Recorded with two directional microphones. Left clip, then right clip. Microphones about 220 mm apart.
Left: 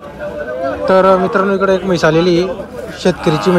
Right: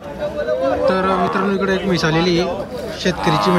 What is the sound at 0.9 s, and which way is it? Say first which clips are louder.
A man's voice: left 12 dB; centre (ahead or behind).